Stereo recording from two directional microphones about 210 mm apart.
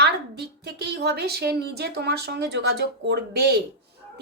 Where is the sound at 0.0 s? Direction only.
50° right (ahead or behind).